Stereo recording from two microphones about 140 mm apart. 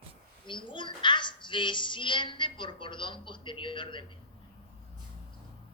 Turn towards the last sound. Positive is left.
turn(degrees=35)  # may be behind; listen again after turning